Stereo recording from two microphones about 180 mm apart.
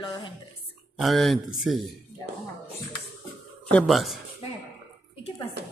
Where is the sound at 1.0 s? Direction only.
Centre (ahead or behind).